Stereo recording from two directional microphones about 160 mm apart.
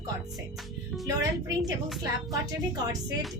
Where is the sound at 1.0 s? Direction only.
20° right (ahead or behind).